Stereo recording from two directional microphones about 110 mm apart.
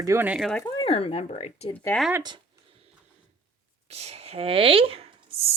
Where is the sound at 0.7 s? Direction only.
60° left (ahead or behind); by 1.7 s 90° left.